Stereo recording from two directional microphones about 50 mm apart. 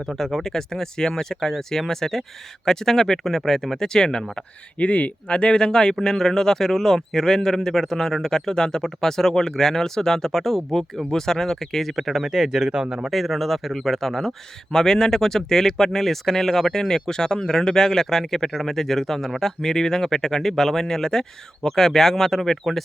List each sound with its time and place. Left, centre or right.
0.2 s speech: centre
4.8 s speech: left; by 13.1 s centre
13.1 s speech: centre